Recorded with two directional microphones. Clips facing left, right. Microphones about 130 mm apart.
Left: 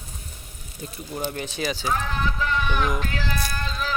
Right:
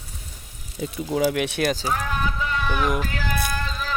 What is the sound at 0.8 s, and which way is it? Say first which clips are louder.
Speech: right 9 dB; 90° right.